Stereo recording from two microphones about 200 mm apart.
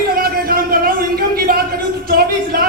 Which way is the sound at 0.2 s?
45° right (ahead or behind).